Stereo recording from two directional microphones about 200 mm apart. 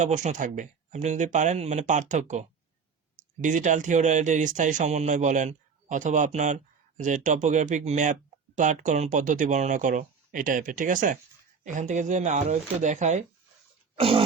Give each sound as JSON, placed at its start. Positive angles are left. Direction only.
{"t": 0.0, "sound": "speech", "side_deg": -35}
{"t": 14.0, "sound": "throat clearing", "side_deg": -25}